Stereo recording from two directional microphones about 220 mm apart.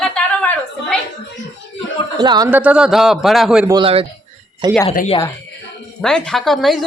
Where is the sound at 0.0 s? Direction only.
5° left (ahead or behind).